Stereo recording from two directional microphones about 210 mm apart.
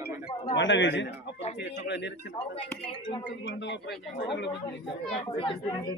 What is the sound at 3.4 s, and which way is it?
Speech, 55° left (ahead or behind).